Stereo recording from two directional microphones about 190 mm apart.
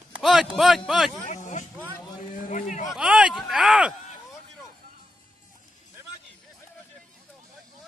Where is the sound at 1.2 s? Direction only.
40° left (ahead or behind).